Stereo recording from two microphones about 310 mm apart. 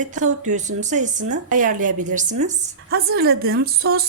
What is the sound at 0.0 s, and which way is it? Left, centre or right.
A woman's voice, right.